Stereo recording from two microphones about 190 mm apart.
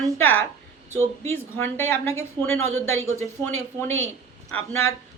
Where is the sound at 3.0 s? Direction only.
90° right.